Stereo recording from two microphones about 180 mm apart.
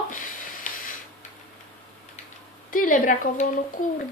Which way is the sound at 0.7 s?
50° left (ahead or behind).